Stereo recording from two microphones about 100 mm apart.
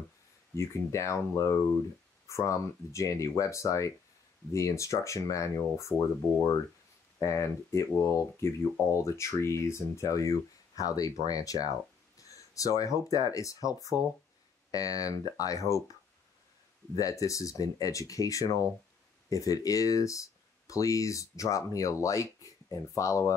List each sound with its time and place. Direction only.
0.6 s speech: 30° left (ahead or behind)
7.2 s speech: 30° left (ahead or behind)